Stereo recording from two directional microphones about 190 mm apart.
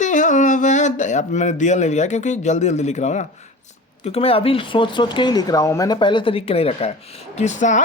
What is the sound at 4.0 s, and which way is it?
Speech, 30° left (ahead or behind).